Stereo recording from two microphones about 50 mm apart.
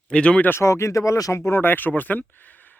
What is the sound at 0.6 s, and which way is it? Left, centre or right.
Speech, left.